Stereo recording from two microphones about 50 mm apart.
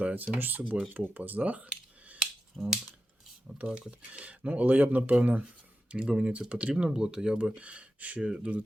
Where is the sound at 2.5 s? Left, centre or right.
Centre.